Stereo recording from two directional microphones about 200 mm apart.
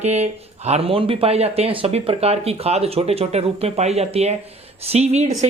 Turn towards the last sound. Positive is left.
turn(degrees=-30)  # may be behind; listen again after turning